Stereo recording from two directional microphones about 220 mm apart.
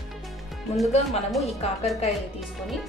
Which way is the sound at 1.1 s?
Centre (ahead or behind).